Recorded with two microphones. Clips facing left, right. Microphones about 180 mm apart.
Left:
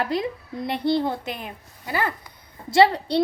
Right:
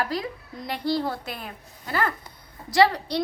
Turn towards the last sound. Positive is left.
turn(degrees=25)  # may be behind; listen again after turning